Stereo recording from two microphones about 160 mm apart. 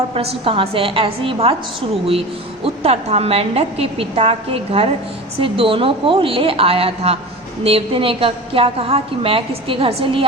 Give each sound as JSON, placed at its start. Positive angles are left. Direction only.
{"t": 0.1, "sound": "a woman's voice", "side_deg": -35}
{"t": 2.6, "sound": "a woman's voice", "side_deg": -40}